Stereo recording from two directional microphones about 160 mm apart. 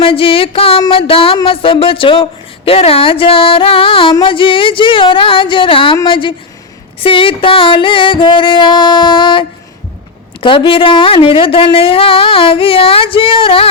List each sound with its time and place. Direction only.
0.0 s music: 35° left (ahead or behind)